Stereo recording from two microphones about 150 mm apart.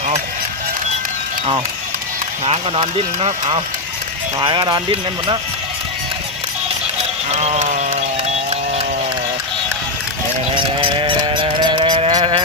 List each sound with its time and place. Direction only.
2.4 s speech: 40° right (ahead or behind)
4.4 s speech: 30° right (ahead or behind)
7.3 s sheep: 45° right (ahead or behind)
10.5 s sheep: 35° right (ahead or behind)
12.1 s livestock: 35° right (ahead or behind)